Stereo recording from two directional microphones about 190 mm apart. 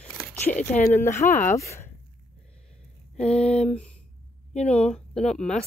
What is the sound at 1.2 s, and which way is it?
Speech, 40° left (ahead or behind).